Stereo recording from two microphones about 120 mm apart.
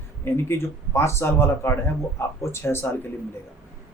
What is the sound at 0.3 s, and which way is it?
Speech, 20° left (ahead or behind).